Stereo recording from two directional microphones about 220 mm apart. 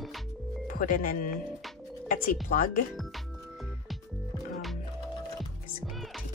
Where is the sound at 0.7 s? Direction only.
40° left (ahead or behind).